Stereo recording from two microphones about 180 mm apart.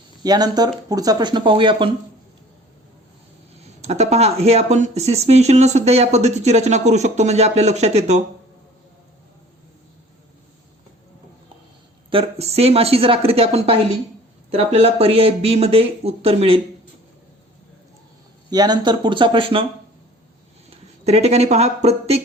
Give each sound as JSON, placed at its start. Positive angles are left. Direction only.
{"t": 0.2, "sound": "speech", "side_deg": -20}
{"t": 3.6, "sound": "speech", "side_deg": -35}
{"t": 12.1, "sound": "speech", "side_deg": -35}
{"t": 18.5, "sound": "speech", "side_deg": -20}
{"t": 20.7, "sound": "speech", "side_deg": -35}